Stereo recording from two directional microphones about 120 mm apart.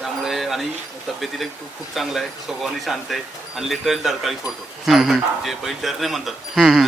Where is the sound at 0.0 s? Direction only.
Centre (ahead or behind).